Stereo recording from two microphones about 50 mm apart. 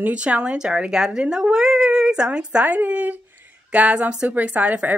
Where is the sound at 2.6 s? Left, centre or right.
Right.